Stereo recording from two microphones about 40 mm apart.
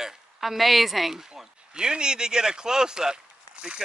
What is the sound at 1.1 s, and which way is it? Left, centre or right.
Speech, right.